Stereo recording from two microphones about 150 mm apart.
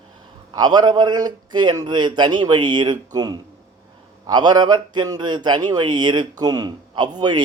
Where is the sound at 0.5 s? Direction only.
30° right (ahead or behind).